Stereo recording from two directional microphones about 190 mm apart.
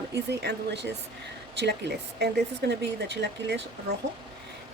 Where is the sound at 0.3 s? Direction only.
60° right (ahead or behind).